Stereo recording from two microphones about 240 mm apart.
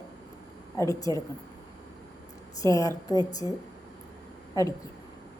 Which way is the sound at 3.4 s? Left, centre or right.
Centre.